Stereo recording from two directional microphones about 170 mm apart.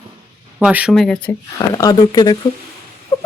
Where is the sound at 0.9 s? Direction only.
5° left (ahead or behind).